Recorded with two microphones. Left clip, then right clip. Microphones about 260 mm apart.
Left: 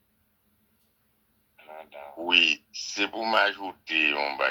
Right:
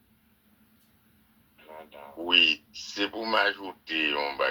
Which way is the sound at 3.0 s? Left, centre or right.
Left.